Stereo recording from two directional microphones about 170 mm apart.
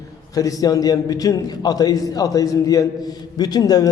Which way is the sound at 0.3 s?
20° left (ahead or behind).